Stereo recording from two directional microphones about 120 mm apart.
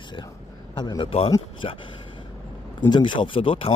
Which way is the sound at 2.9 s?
40° left (ahead or behind).